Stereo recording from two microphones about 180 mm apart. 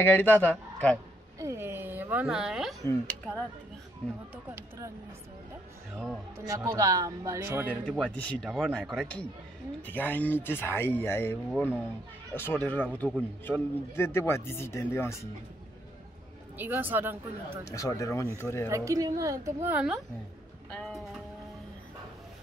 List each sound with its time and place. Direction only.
0.0 s a man's voice: 10° left (ahead or behind)
1.4 s a woman's voice: 15° right (ahead or behind)
2.8 s a man's voice: 15° left (ahead or behind)
4.5 s speech: 15° right (ahead or behind)
6.3 s speech: 20° right (ahead or behind)
7.9 s a man's voice: 5° left (ahead or behind)
16.5 s speech: 10° right (ahead or behind)
17.6 s a man's voice: 15° left (ahead or behind)
18.7 s speech: 15° right (ahead or behind); by 21.0 s 5° left (ahead or behind)